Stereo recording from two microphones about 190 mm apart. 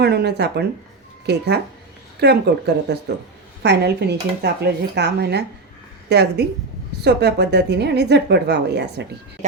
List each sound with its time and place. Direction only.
0.0 s a woman's voice: 60° right (ahead or behind)